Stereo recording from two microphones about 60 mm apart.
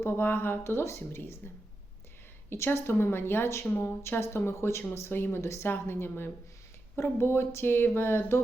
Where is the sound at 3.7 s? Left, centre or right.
Left.